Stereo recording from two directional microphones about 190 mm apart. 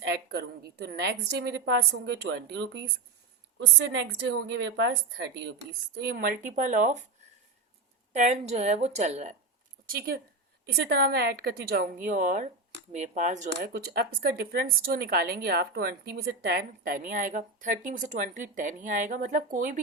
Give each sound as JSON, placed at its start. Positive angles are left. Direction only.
{"t": 0.0, "sound": "a woman's voice", "side_deg": -60}
{"t": 8.1, "sound": "a woman's voice", "side_deg": -35}
{"t": 9.8, "sound": "a woman's voice", "side_deg": -50}
{"t": 13.7, "sound": "a woman's voice", "side_deg": -55}